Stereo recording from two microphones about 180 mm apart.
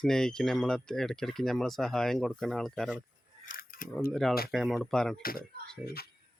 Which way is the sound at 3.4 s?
50° left (ahead or behind).